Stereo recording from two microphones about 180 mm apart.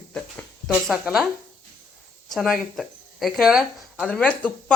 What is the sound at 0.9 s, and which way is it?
Speech, centre (ahead or behind).